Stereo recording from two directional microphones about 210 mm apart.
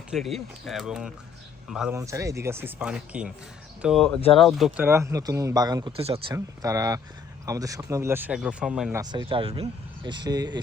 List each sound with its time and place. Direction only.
0.1 s speech: centre (ahead or behind)
2.0 s speech: 15° right (ahead or behind)
4.9 s speech: 15° right (ahead or behind)
6.3 s speech: 15° right (ahead or behind)
9.0 s speech: 20° right (ahead or behind)